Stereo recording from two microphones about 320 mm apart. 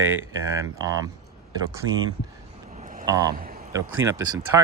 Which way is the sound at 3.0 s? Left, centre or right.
Centre.